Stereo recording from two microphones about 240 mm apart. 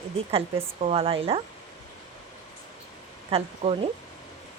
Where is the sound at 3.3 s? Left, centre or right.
Right.